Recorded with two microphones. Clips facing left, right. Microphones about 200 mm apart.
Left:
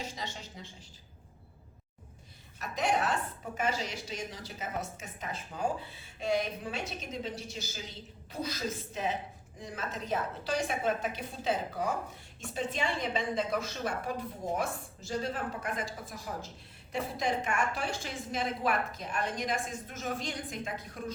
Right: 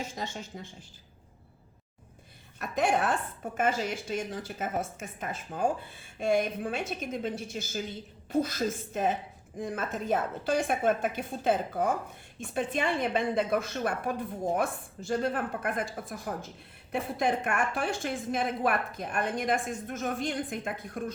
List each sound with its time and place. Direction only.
0.2 s a woman's voice: 50° right (ahead or behind)
2.6 s a woman's voice: 55° right (ahead or behind)